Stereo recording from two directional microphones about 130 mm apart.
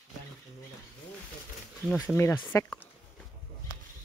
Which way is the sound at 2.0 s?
20° left (ahead or behind).